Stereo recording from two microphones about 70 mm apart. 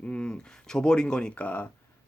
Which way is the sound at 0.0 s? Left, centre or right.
Centre.